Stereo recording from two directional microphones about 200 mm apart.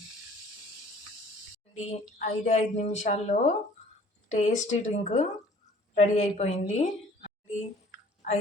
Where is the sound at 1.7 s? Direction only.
35° left (ahead or behind).